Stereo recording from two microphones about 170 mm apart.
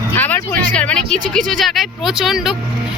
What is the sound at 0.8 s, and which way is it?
Speech, 5° left (ahead or behind).